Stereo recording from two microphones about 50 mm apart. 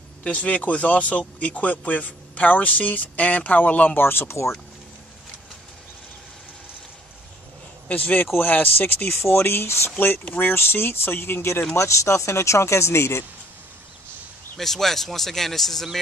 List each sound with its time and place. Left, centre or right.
0.2 s speech: left
4.0 s speech: left
7.9 s speech: left
9.1 s speech: left
11.7 s speech: left
14.6 s speech: centre